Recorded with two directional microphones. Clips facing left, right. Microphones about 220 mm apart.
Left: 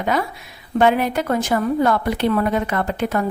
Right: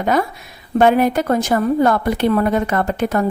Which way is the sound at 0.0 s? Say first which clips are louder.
Right 4 dB; 45° right (ahead or behind).